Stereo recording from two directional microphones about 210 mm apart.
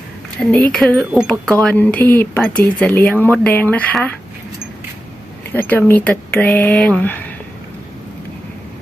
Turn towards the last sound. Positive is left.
turn(degrees=10)  # may be behind; listen again after turning